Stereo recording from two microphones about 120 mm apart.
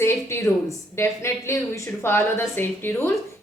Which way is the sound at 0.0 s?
20° left (ahead or behind).